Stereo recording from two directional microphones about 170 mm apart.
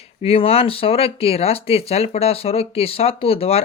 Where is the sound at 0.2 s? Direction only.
35° left (ahead or behind).